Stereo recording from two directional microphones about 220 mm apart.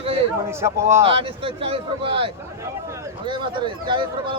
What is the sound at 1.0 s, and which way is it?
Speech, 25° right (ahead or behind).